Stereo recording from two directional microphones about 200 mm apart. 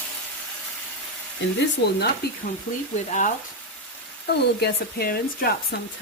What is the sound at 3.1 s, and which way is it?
Frying, 40° left (ahead or behind).